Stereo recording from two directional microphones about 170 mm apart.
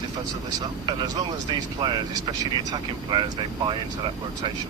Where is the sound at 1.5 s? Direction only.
25° right (ahead or behind).